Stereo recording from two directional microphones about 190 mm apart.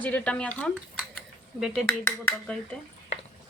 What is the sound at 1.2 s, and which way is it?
Cutlery, centre (ahead or behind).